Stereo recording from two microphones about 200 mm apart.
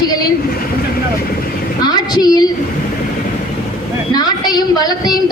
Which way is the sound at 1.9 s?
20° left (ahead or behind).